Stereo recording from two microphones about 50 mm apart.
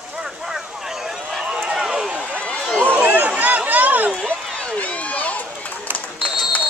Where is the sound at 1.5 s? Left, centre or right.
Centre.